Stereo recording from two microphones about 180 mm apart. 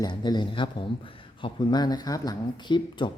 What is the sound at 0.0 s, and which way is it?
Speech, 25° left (ahead or behind).